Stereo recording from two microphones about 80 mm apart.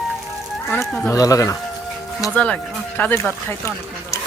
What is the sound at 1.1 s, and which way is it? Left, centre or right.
Speech, left.